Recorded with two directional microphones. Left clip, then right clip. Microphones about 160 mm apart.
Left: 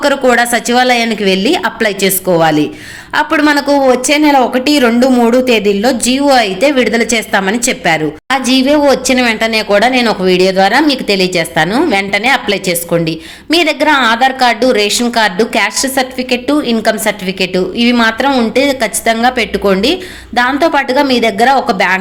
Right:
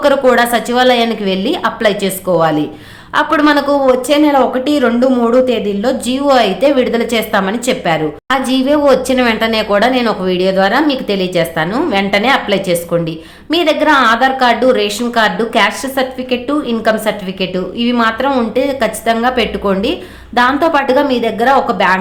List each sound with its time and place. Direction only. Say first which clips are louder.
0.0 s a woman's voice: even; 15° left (ahead or behind)